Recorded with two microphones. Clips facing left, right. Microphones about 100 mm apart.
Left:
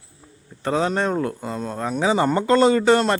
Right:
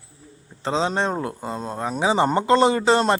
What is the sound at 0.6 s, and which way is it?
A man's voice, 20° right (ahead or behind).